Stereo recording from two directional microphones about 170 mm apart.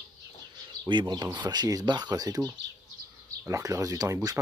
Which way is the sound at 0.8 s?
25° right (ahead or behind).